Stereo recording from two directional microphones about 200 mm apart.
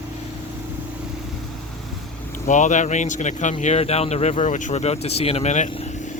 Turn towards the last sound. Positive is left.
turn(degrees=35)  # may be behind; listen again after turning